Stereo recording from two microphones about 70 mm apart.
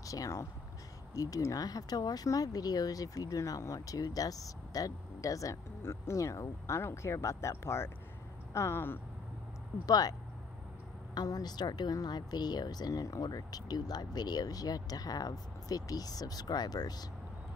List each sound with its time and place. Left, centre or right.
0.0 s speech: left
5.8 s speech: left
9.8 s speech: left
11.1 s speech: left